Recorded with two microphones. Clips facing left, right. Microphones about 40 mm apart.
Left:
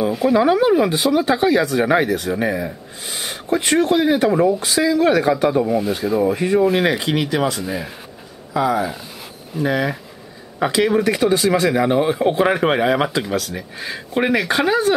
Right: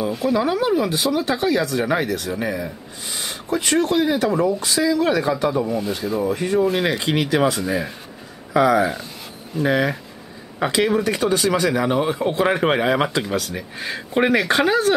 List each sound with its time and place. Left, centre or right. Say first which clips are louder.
0.1 s speech: left 6 dB; centre
3.4 s speech: left 3 dB; left
5.6 s speech: left 4 dB; centre
6.2 s speech: left 2 dB; centre
6.6 s speech: left 3 dB; centre
8.5 s speech: right 3 dB; right
9.6 s speech: even; centre
11.0 s speech: left 3 dB; centre
12.4 s speech: left 2 dB; centre